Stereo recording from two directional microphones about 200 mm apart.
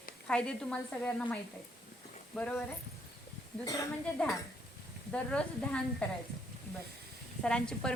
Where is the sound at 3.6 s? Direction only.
15° left (ahead or behind).